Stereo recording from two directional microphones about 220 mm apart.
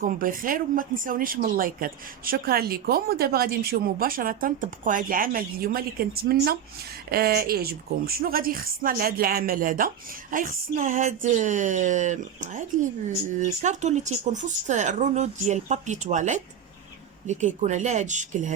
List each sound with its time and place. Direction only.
0.0 s a woman's voice: 40° right (ahead or behind)